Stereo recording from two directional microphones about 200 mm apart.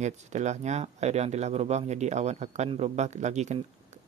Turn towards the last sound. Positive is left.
turn(degrees=-35)  # may be behind; listen again after turning